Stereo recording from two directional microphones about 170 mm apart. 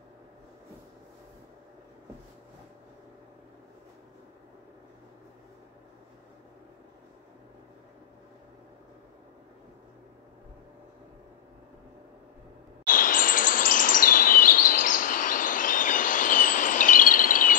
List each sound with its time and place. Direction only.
12.8 s bird vocalization: 50° left (ahead or behind)